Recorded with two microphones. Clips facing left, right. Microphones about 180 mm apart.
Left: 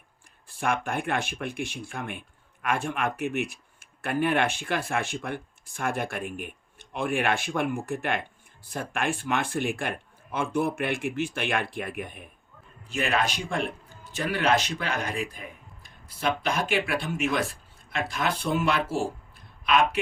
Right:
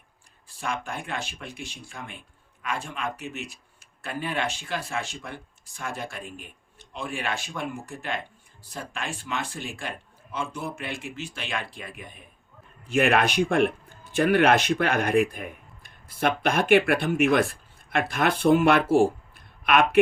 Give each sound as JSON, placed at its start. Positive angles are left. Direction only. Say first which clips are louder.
{"t": 0.4, "sound": "speech", "louder": "left 4 dB", "side_deg": 55}
{"t": 12.9, "sound": "speech", "louder": "right 5 dB", "side_deg": -60}